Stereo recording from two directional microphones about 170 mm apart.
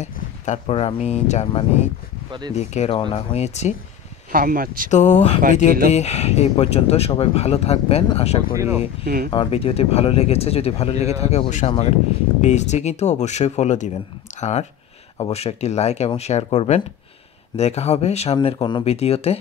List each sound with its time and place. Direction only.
0.0 s speech: 45° left (ahead or behind)
4.3 s speech: 55° right (ahead or behind)
4.9 s speech: 45° left (ahead or behind)
8.5 s speech: 15° right (ahead or behind)
9.0 s speech: 60° right (ahead or behind)
9.3 s speech: 30° left (ahead or behind)